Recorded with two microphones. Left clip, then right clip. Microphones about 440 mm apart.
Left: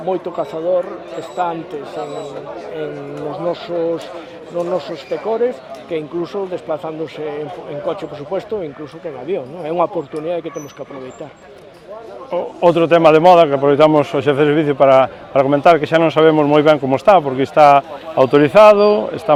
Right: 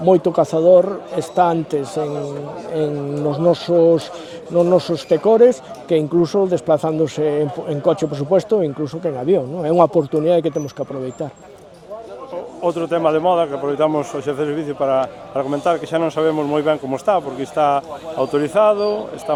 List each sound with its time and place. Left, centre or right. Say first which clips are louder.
0.0 s speech: right 6 dB; right
3.3 s speech: right 6 dB; right
12.3 s speech: left 8 dB; left